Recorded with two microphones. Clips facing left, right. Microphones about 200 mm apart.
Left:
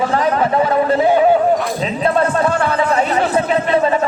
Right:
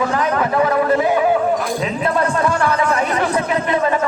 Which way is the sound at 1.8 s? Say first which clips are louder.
Left 4 dB; 30° left (ahead or behind).